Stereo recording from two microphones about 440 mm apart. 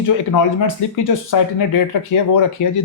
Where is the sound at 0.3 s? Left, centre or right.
Left.